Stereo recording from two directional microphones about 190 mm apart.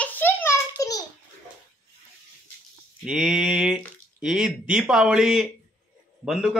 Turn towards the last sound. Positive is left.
turn(degrees=0)  # may be behind; listen again after turning